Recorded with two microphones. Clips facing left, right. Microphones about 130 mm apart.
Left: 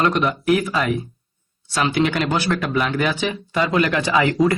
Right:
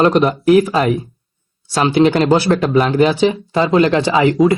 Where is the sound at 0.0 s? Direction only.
30° right (ahead or behind).